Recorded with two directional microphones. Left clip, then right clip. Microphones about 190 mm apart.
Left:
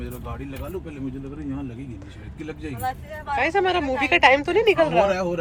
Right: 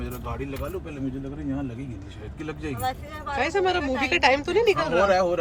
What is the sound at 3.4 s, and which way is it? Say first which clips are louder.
A woman's voice: left 2 dB; 15° right (ahead or behind).